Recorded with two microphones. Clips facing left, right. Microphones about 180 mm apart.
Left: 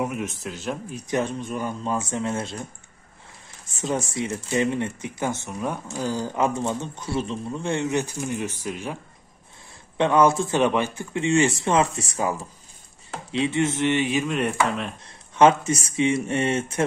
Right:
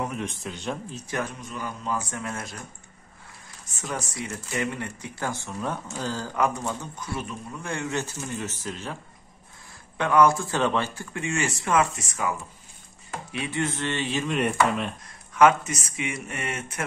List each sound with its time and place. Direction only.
0.0 s a man's voice: 5° left (ahead or behind); by 2.6 s 25° left (ahead or behind)
3.6 s a man's voice: 25° left (ahead or behind)
9.9 s speech: 25° left (ahead or behind)
14.2 s chopping: centre (ahead or behind)
15.3 s speech: 25° left (ahead or behind)